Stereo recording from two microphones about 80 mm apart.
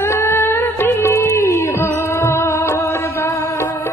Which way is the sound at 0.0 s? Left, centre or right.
Left.